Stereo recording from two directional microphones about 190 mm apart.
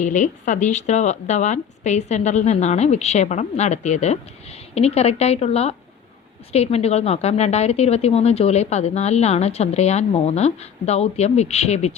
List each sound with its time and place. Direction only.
0.0 s a woman's voice: 40° left (ahead or behind)